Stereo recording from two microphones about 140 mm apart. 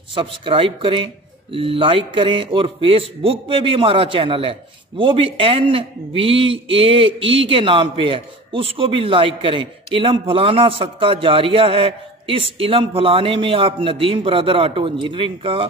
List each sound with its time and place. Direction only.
0.1 s speech: 35° right (ahead or behind)